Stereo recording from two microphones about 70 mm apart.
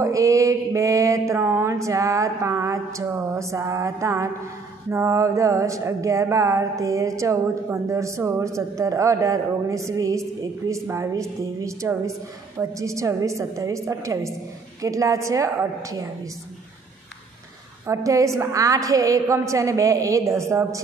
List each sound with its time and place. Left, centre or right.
0.0 s a sound: right
3.3 s speech: right
17.8 s speech: right